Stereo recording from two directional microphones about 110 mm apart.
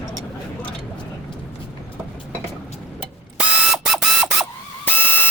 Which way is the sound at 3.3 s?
5° right (ahead or behind).